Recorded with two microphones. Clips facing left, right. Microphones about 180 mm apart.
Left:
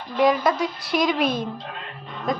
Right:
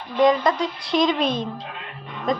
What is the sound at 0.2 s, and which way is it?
Speech, 5° left (ahead or behind).